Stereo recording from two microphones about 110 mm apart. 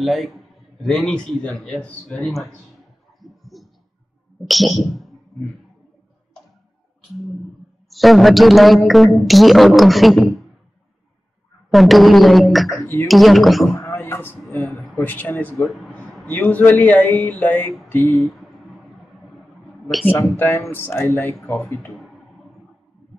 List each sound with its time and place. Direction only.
0.0 s a man's voice: centre (ahead or behind)
3.2 s heart sounds: centre (ahead or behind)
4.5 s speech: centre (ahead or behind)
7.9 s a woman's voice: centre (ahead or behind)
11.7 s a woman's voice: centre (ahead or behind)
13.7 s a sound: 25° left (ahead or behind)
14.6 s a sound: centre (ahead or behind)
15.0 s a man's voice: 15° left (ahead or behind)
17.8 s a sound: 20° left (ahead or behind)
20.1 s speech: 20° left (ahead or behind)